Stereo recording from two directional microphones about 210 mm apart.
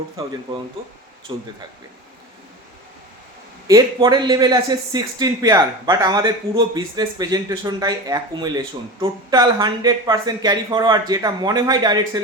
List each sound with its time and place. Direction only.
1.3 s speech: 20° right (ahead or behind)
3.7 s speech: 20° right (ahead or behind)